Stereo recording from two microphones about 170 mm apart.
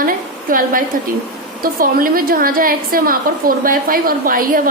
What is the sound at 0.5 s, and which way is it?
A woman's voice, 55° right (ahead or behind).